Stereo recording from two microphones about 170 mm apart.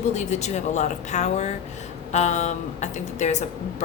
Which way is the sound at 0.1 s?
45° left (ahead or behind).